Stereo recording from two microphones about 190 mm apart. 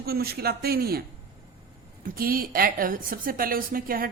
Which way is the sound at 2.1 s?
50° right (ahead or behind).